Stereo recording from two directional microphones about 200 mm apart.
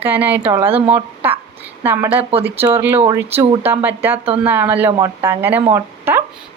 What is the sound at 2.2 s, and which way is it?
Speech, 30° right (ahead or behind).